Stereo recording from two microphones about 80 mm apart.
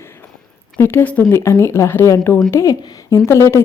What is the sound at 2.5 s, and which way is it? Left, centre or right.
A woman's voice, left.